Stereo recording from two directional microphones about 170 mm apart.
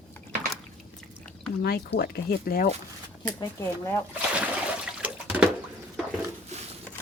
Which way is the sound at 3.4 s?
15° left (ahead or behind).